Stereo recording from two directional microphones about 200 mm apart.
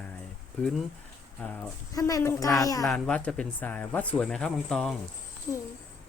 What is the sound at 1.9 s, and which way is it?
Speech, 15° left (ahead or behind).